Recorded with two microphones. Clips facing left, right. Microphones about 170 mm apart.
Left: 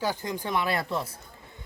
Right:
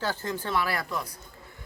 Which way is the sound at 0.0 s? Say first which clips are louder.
Left 1 dB; 15° left (ahead or behind).